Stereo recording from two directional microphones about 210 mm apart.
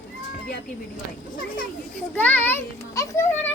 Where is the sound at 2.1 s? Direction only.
5° left (ahead or behind).